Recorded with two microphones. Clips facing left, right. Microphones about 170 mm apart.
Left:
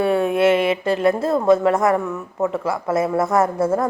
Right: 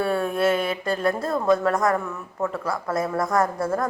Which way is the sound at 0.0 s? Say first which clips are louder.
Left 5 dB; 20° left (ahead or behind).